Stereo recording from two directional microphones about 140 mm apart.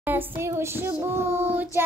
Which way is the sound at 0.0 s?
15° right (ahead or behind).